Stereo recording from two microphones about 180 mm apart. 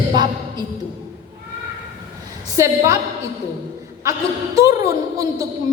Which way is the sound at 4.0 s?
15° right (ahead or behind).